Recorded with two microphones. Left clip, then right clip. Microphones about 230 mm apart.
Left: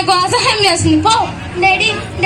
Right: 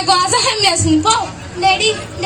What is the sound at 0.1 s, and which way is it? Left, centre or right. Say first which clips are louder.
A woman's voice: left 1 dB; right.